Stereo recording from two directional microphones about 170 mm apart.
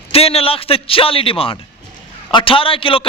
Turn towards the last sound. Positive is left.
turn(degrees=30)  # may be behind; listen again after turning